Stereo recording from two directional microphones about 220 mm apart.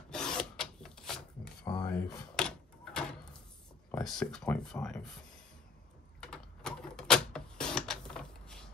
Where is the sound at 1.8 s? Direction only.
5° left (ahead or behind).